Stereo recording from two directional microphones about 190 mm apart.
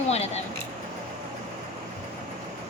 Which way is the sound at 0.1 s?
35° left (ahead or behind).